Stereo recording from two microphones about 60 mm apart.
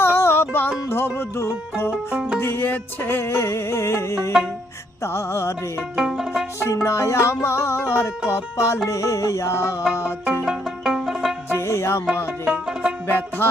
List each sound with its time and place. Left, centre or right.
0.0 s music: left
2.1 s music: centre
2.4 s music: left
6.0 s music: centre
6.8 s music: left
8.9 s mantra: left
10.4 s music: centre
11.5 s music: left
12.5 s music: centre
13.1 s music: left